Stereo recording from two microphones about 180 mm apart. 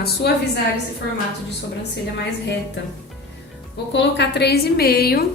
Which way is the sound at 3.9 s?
75° left (ahead or behind).